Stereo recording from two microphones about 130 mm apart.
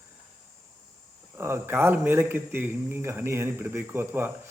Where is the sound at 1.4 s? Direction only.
20° right (ahead or behind).